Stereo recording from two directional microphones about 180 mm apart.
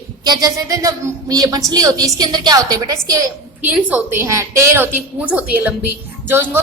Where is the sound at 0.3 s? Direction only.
20° right (ahead or behind).